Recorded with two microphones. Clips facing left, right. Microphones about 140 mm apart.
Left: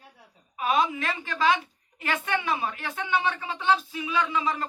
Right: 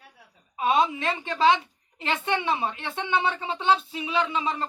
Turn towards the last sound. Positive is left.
turn(degrees=-25)  # may be behind; listen again after turning